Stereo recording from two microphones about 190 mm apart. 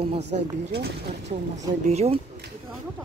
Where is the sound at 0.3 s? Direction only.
40° right (ahead or behind).